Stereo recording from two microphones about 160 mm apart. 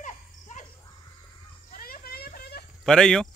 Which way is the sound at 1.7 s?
65° left (ahead or behind).